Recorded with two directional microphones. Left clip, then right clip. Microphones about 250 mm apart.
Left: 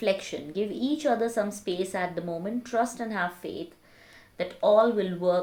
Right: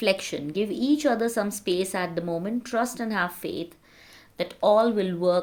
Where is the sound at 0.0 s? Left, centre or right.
Right.